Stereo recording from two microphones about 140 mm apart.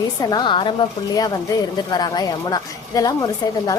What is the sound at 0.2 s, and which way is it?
A woman's voice, 30° left (ahead or behind).